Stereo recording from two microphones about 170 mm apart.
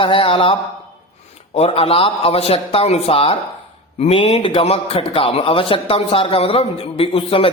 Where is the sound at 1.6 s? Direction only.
35° left (ahead or behind).